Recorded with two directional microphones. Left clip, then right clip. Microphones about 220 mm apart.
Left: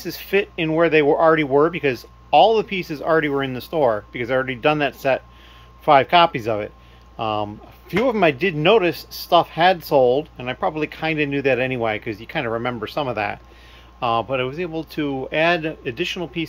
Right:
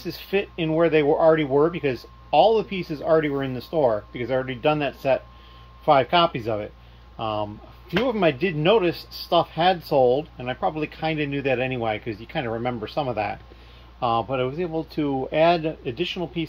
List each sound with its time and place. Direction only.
0.0 s speech: 15° left (ahead or behind)